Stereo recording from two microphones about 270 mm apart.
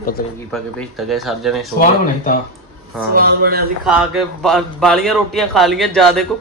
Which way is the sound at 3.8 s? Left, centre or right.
Centre.